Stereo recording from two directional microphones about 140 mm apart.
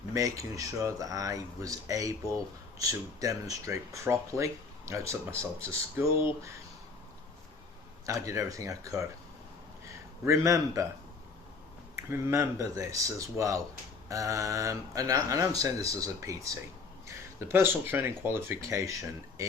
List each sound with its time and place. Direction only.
0.1 s speech: 25° right (ahead or behind)
8.0 s speech: 20° right (ahead or behind)
10.2 s speech: 20° right (ahead or behind)
11.9 s speech: 20° right (ahead or behind)